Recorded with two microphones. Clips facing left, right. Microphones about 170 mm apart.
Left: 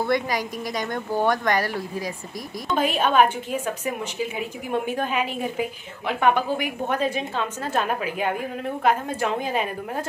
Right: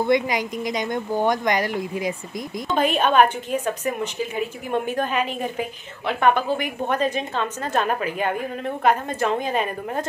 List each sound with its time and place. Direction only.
0.0 s a woman's voice: 20° right (ahead or behind)
2.8 s a woman's voice: 5° left (ahead or behind)